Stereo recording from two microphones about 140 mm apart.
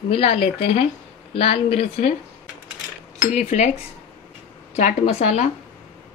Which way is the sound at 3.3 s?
55° left (ahead or behind).